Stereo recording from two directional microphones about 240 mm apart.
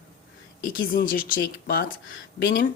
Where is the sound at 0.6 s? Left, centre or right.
Left.